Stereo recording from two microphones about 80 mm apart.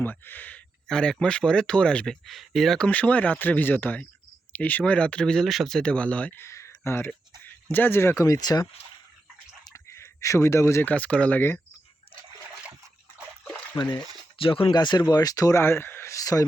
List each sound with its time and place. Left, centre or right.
0.0 s speech: left
0.9 s speech: centre
2.7 s speech: centre
6.4 s a sound: left
7.7 s speech: left
8.4 s speech: left
9.7 s a sound: left
10.8 s speech: centre
13.7 s speech: left
14.3 s speech: left
15.5 s speech: left
16.1 s a sound: left